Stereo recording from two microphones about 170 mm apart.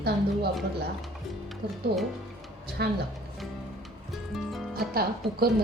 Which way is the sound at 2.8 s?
70° right (ahead or behind).